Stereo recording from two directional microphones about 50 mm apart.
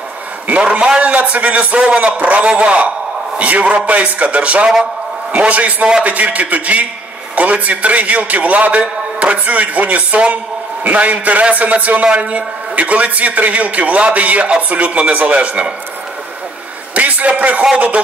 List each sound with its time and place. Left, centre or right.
0.5 s speech: right
16.9 s speech: right